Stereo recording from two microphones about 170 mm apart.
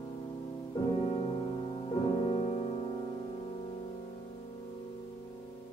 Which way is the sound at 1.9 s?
40° left (ahead or behind).